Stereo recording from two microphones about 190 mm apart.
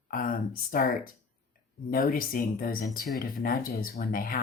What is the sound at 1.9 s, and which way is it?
Speech, 50° left (ahead or behind).